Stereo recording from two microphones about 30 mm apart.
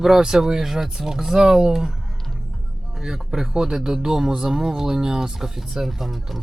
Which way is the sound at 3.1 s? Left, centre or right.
Centre.